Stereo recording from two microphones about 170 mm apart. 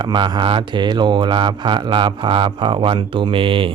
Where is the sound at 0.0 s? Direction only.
25° right (ahead or behind).